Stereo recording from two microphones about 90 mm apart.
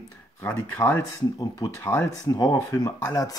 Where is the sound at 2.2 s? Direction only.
45° left (ahead or behind).